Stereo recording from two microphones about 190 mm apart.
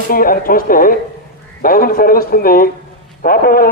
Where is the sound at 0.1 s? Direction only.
50° left (ahead or behind).